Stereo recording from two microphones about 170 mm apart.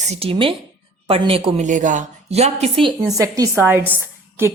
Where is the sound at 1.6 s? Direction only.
50° right (ahead or behind).